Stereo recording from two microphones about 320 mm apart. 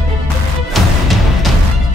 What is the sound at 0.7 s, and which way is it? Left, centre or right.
Music, centre.